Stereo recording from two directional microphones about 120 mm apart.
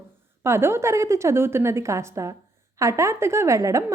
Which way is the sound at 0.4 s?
20° right (ahead or behind).